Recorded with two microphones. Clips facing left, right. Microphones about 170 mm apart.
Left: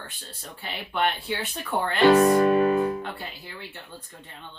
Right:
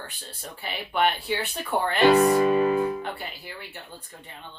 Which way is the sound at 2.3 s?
50° left (ahead or behind).